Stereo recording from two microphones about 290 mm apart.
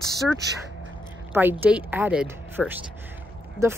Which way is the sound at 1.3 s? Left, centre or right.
Centre.